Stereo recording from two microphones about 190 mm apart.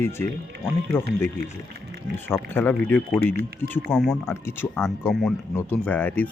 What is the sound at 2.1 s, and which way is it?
Speech, 10° left (ahead or behind).